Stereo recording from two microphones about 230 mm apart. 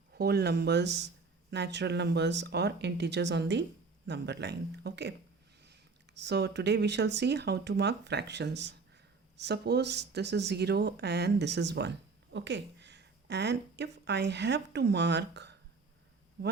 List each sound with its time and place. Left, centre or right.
0.1 s speech: right